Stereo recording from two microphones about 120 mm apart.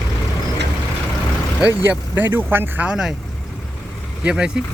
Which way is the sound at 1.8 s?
15° right (ahead or behind).